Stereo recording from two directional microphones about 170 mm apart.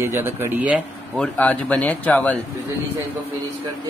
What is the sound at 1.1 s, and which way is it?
Speech, 5° left (ahead or behind).